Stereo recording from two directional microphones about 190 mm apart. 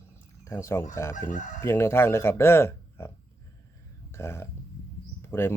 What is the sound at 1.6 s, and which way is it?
Speech, 15° left (ahead or behind).